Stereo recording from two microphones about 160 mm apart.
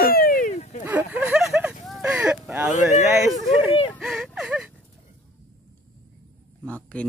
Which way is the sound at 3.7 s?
35° left (ahead or behind).